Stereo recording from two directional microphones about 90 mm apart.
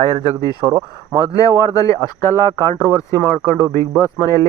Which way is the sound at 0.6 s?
35° right (ahead or behind).